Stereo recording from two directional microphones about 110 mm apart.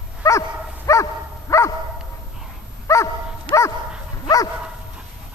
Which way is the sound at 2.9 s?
25° left (ahead or behind).